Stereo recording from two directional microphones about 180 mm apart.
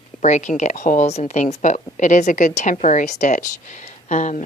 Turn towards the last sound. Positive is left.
turn(degrees=40)  # may be behind; listen again after turning